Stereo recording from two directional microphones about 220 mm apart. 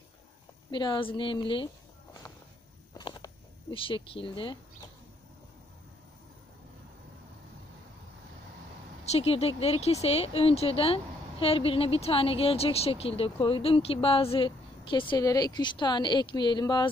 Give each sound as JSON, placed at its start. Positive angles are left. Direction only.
{"t": 0.7, "sound": "a woman's voice", "side_deg": 20}
{"t": 3.0, "sound": "a sound", "side_deg": 20}
{"t": 3.7, "sound": "a woman's voice", "side_deg": 25}
{"t": 9.0, "sound": "a woman's voice", "side_deg": 30}